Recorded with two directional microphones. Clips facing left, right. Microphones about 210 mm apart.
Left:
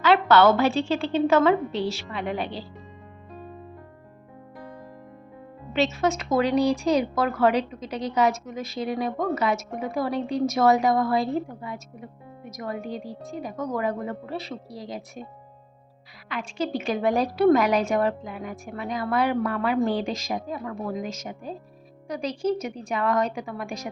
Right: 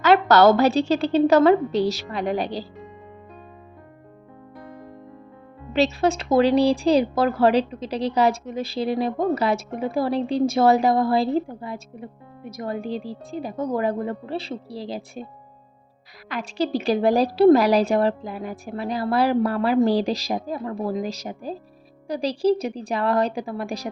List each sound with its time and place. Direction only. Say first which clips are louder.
0.0 s speech: right 3 dB; 40° right (ahead or behind)
5.7 s speech: right 3 dB; 35° right (ahead or behind)
16.3 s speech: right 4 dB; 35° right (ahead or behind)